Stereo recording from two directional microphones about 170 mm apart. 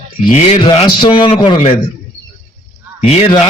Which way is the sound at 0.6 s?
30° left (ahead or behind).